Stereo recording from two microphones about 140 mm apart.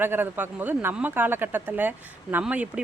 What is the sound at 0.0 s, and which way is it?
Speech, 15° right (ahead or behind).